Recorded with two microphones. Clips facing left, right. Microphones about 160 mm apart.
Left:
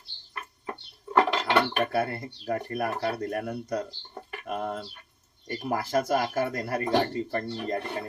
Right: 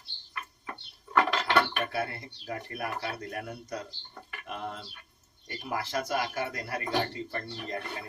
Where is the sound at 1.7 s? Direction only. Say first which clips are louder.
Left 6 dB; 50° left (ahead or behind).